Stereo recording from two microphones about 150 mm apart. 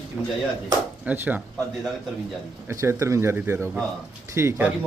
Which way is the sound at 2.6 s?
20° right (ahead or behind).